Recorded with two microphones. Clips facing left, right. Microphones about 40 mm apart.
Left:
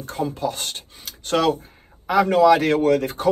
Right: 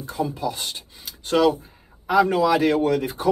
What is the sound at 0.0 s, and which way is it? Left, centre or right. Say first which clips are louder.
Speech: left 1 dB; left.